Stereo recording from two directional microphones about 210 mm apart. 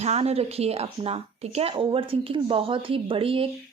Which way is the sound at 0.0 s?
30° right (ahead or behind).